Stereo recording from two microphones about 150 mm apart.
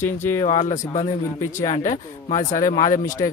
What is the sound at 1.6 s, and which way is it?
Speech, 55° left (ahead or behind).